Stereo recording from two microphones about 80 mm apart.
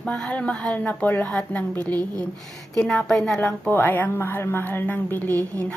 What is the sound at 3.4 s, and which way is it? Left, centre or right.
A woman's voice, left.